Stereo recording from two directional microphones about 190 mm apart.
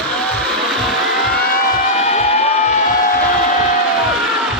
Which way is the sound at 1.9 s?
35° left (ahead or behind).